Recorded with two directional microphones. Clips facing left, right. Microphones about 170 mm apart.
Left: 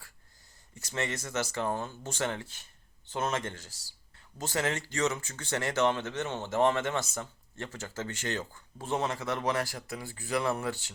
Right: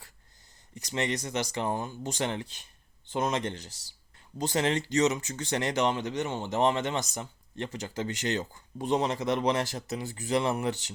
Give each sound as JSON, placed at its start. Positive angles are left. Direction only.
{"t": 0.8, "sound": "speech", "side_deg": -15}